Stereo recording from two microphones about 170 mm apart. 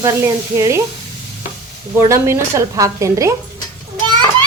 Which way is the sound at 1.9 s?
15° right (ahead or behind).